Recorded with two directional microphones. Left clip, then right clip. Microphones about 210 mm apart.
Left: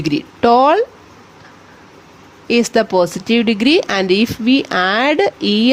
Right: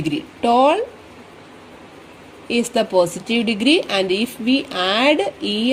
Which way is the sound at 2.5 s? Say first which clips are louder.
Left 5 dB; 35° left (ahead or behind).